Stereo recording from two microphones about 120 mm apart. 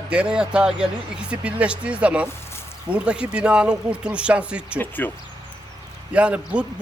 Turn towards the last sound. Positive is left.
turn(degrees=-10)  # may be behind; listen again after turning